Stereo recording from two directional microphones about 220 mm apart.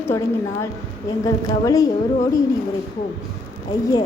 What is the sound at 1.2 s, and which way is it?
Speech, 15° left (ahead or behind).